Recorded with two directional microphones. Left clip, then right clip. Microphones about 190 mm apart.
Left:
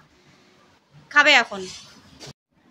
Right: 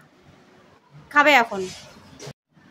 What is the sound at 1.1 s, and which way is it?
Speech, 15° right (ahead or behind).